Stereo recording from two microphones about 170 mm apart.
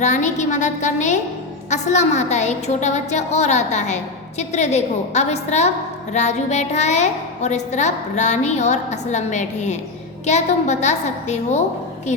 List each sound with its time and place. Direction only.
0.0 s a woman's voice: 45° left (ahead or behind)